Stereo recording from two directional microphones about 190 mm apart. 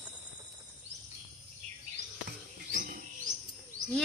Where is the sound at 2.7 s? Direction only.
45° right (ahead or behind).